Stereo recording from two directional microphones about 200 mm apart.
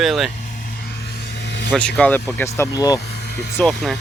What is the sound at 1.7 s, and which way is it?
Speech, 5° left (ahead or behind).